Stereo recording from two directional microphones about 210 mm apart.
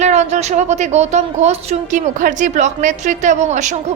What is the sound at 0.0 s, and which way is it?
A woman's voice, 35° right (ahead or behind).